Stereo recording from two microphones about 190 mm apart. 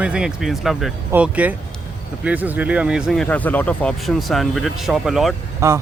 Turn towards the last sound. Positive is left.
turn(degrees=-15)  # may be behind; listen again after turning